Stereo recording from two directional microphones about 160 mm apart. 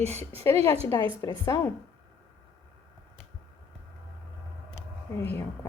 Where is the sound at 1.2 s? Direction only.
20° left (ahead or behind).